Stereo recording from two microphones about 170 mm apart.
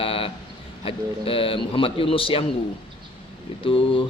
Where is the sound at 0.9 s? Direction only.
35° left (ahead or behind).